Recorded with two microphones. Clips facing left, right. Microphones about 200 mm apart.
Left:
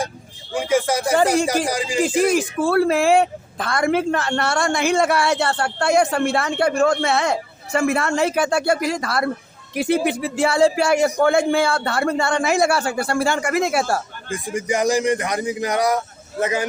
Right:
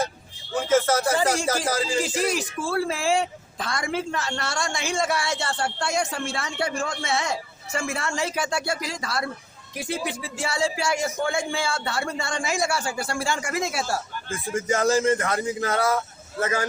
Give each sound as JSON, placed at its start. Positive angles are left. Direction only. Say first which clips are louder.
{"t": 0.5, "sound": "a sound", "louder": "left 1 dB", "side_deg": 15}
{"t": 1.6, "sound": "speech", "louder": "left 2 dB", "side_deg": 15}
{"t": 2.0, "sound": "speech", "louder": "left 7 dB", "side_deg": 55}
{"t": 14.3, "sound": "speech", "louder": "left 2 dB", "side_deg": 15}